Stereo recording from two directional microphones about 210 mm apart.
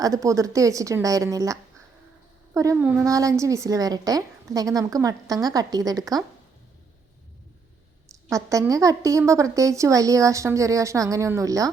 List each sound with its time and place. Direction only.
0.0 s a woman's voice: 15° right (ahead or behind)
8.1 s a woman's voice: 15° right (ahead or behind)